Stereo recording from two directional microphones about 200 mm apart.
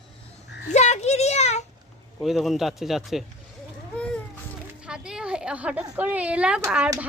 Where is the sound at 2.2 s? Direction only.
Centre (ahead or behind).